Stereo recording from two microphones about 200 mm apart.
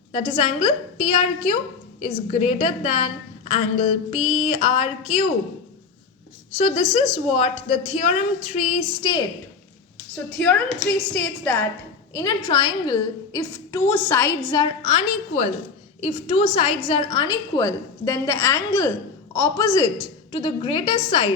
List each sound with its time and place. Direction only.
0.1 s a woman's voice: 30° left (ahead or behind)
6.6 s a woman's voice: 25° left (ahead or behind)
9.0 s a woman's voice: 20° left (ahead or behind)
10.3 s a woman's voice: 5° left (ahead or behind)
12.1 s a woman's voice: 20° left (ahead or behind)
14.6 s a woman's voice: 30° left (ahead or behind)